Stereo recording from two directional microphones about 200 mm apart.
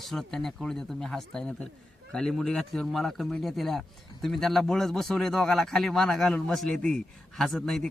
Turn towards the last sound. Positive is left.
turn(degrees=0)  # may be behind; listen again after turning